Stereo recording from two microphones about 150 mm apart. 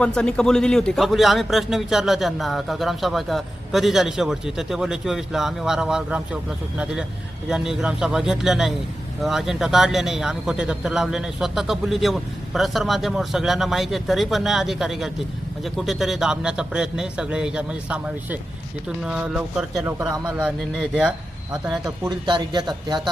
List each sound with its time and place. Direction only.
0.0 s a man's voice: 5° left (ahead or behind)
21.8 s speech: 25° right (ahead or behind)